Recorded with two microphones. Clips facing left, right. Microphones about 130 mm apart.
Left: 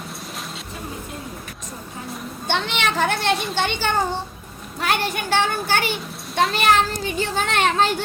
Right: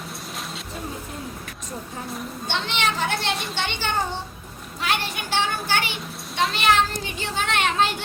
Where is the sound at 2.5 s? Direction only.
55° left (ahead or behind); by 7.9 s 40° left (ahead or behind).